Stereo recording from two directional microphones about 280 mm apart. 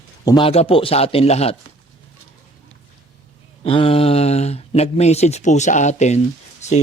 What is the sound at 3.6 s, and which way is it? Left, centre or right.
Speech, centre.